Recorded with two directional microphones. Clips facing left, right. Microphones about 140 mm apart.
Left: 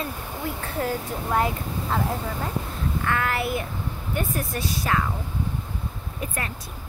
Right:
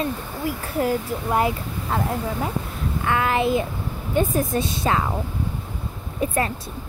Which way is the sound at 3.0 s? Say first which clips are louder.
Right 6 dB; 20° right (ahead or behind).